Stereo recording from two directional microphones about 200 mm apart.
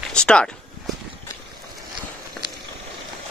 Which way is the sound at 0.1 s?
5° left (ahead or behind).